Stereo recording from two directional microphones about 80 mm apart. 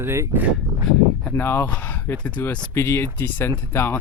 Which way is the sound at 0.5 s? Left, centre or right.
Centre.